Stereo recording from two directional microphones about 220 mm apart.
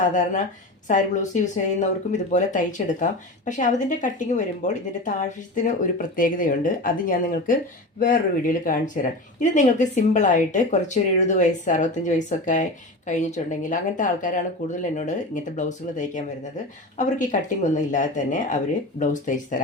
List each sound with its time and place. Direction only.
0.0 s speech: 35° left (ahead or behind)